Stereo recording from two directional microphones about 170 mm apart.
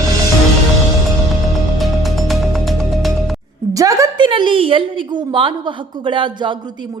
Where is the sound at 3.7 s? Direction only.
20° right (ahead or behind).